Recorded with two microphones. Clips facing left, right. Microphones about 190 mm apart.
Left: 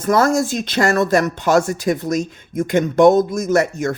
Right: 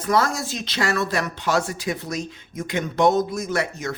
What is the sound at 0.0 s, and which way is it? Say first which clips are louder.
Speech: left 6 dB; 45° left (ahead or behind).